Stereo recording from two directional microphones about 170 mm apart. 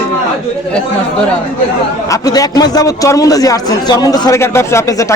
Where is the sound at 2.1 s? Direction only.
20° left (ahead or behind).